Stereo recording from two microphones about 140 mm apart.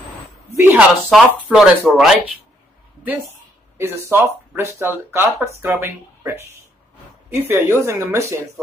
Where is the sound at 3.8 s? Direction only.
15° right (ahead or behind).